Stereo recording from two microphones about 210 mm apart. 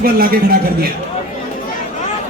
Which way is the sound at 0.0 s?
45° right (ahead or behind).